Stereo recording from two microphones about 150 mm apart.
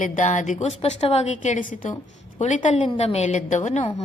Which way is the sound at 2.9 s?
45° left (ahead or behind).